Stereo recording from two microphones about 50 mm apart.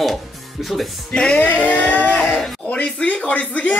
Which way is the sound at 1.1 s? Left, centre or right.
Centre.